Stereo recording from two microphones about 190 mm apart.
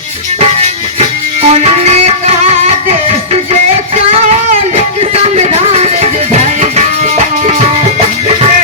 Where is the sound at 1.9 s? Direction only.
35° right (ahead or behind).